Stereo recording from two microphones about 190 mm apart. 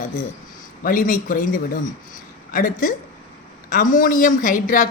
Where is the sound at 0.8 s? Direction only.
45° left (ahead or behind).